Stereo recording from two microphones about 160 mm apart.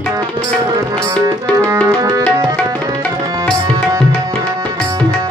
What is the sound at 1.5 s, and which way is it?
Music, 20° right (ahead or behind).